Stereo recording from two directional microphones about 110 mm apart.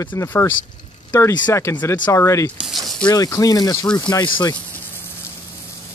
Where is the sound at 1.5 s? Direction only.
25° left (ahead or behind).